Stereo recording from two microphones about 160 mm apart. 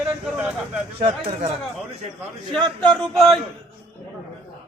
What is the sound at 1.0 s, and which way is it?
Speech, 35° right (ahead or behind).